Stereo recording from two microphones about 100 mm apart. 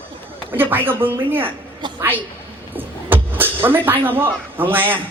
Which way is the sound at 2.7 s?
20° right (ahead or behind).